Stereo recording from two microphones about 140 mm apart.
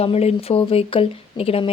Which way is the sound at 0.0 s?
45° left (ahead or behind).